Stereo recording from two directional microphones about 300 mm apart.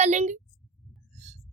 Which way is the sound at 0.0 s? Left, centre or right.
Right.